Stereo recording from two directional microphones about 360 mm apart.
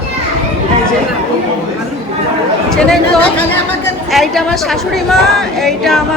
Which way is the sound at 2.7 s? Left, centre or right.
Centre.